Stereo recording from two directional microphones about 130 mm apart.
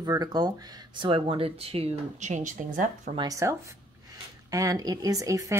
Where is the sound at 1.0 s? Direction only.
45° right (ahead or behind); by 3.1 s 75° right (ahead or behind).